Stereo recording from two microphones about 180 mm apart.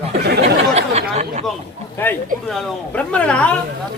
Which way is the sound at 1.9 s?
10° left (ahead or behind).